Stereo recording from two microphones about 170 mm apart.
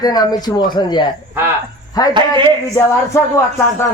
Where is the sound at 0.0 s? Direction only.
25° left (ahead or behind).